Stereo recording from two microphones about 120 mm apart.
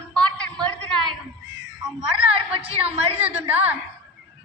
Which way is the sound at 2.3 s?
55° right (ahead or behind).